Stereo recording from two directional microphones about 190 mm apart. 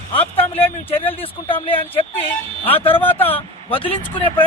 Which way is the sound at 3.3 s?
30° left (ahead or behind).